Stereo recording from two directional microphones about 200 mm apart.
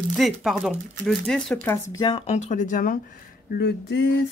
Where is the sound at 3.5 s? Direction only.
55° left (ahead or behind).